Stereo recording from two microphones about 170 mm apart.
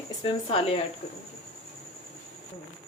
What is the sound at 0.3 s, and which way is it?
Speech, 35° left (ahead or behind).